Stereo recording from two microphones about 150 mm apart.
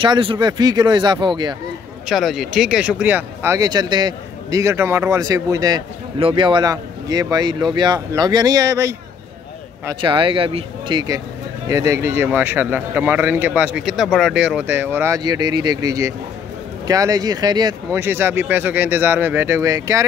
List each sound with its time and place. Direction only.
0.0 s speech: 35° right (ahead or behind)
2.0 s speech: centre (ahead or behind)
3.5 s speech: 25° right (ahead or behind)
6.1 s speech: 35° right (ahead or behind)
10.0 s speech: 35° right (ahead or behind); by 15.1 s 15° right (ahead or behind)
15.1 s speech: 25° right (ahead or behind)
17.9 s speech: 15° right (ahead or behind)